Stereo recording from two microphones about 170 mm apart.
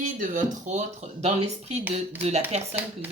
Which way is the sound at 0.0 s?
50° right (ahead or behind).